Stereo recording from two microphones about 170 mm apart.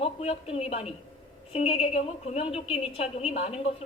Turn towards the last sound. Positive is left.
turn(degrees=40)  # may be behind; listen again after turning